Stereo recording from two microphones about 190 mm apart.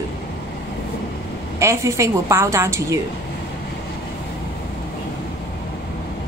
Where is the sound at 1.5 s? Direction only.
15° right (ahead or behind).